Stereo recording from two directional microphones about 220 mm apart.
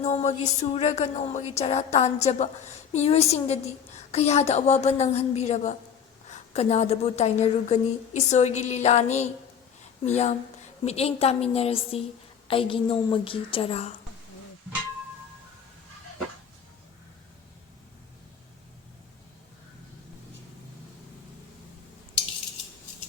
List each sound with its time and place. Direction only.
0.0 s a woman's voice: 30° left (ahead or behind)